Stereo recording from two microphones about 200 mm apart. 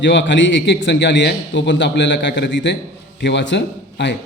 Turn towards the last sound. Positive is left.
turn(degrees=60)  # may be behind; listen again after turning